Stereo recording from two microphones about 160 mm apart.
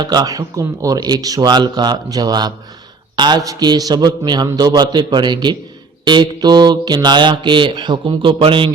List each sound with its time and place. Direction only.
0.0 s speech: 25° right (ahead or behind)